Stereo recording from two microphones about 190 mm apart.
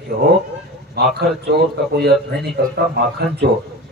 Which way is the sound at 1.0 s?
60° right (ahead or behind).